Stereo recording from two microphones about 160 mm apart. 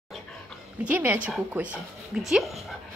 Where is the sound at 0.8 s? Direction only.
10° right (ahead or behind).